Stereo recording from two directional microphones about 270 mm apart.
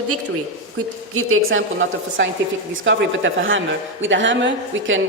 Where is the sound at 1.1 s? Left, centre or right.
Right.